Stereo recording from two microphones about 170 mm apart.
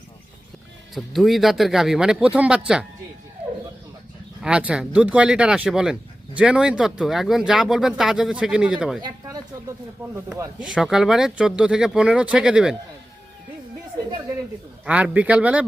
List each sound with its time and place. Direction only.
0.9 s speech: centre (ahead or behind)
4.4 s speech: 5° right (ahead or behind)
9.0 s speech: 25° right (ahead or behind)
10.0 s a man's voice: 10° right (ahead or behind)
10.6 s speech: centre (ahead or behind)
14.8 s a man's voice: 5° right (ahead or behind)